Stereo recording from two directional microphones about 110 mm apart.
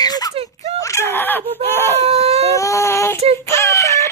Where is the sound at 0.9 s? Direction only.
20° left (ahead or behind).